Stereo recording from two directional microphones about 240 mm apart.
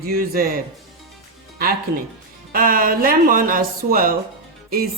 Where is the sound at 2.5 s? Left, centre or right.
Right.